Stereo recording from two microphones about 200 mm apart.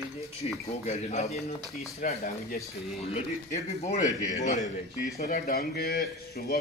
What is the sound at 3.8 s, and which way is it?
Speech, 35° left (ahead or behind).